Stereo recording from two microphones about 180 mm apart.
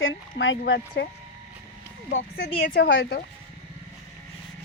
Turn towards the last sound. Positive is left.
turn(degrees=65)  # may be behind; listen again after turning